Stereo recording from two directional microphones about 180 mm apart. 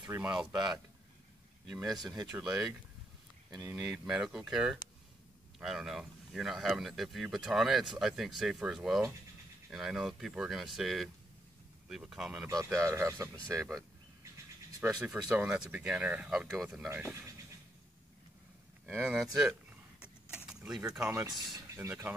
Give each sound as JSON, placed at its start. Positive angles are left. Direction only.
{"t": 0.3, "sound": "speech", "side_deg": -25}
{"t": 1.9, "sound": "speech", "side_deg": 0}
{"t": 3.7, "sound": "speech", "side_deg": -5}
{"t": 12.4, "sound": "speech", "side_deg": -15}
{"t": 18.9, "sound": "speech", "side_deg": 0}
{"t": 20.0, "sound": "keys jangling", "side_deg": -5}
{"t": 21.5, "sound": "speech", "side_deg": -15}